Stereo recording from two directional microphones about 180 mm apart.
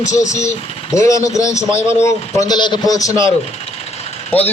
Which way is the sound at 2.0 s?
20° left (ahead or behind).